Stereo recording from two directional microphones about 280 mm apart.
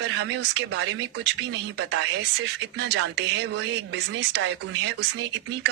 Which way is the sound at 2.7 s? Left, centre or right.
Right.